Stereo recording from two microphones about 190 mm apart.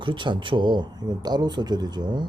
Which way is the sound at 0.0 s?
25° right (ahead or behind).